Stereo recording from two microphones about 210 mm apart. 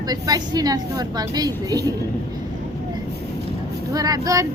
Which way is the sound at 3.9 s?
15° right (ahead or behind).